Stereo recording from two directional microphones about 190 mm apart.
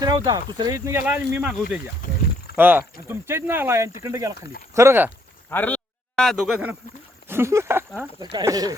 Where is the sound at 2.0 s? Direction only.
45° left (ahead or behind).